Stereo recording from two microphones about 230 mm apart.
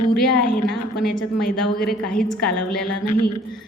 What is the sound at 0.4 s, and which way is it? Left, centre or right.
Speech, left.